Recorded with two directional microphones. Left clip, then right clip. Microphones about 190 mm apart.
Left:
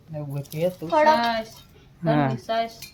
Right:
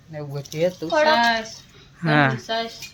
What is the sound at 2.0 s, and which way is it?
Speech, centre (ahead or behind).